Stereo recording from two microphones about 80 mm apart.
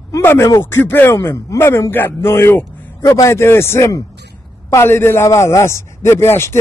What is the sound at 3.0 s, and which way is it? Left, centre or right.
Speech, left.